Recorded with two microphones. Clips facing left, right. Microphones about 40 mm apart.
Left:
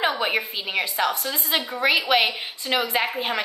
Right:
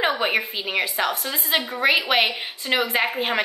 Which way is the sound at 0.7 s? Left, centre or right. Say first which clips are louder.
Left 2 dB; centre.